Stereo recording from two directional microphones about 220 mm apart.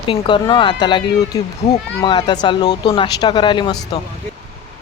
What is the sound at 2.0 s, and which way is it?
Speech, 20° left (ahead or behind).